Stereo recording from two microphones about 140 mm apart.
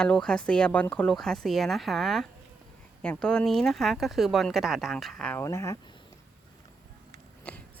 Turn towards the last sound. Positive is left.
turn(degrees=10)  # may be behind; listen again after turning